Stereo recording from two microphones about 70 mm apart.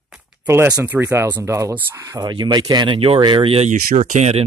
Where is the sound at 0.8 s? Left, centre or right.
Right.